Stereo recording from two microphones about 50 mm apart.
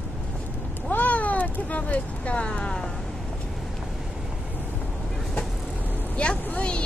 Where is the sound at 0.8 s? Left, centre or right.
Left.